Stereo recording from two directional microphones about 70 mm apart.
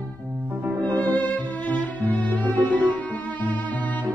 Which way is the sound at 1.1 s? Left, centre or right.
Left.